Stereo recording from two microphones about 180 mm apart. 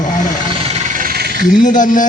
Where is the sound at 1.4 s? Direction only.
45° left (ahead or behind).